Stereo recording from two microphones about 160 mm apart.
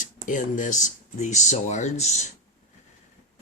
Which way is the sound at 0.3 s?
55° left (ahead or behind).